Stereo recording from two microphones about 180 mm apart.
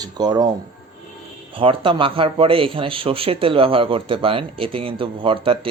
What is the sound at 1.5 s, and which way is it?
A man's voice, 30° right (ahead or behind).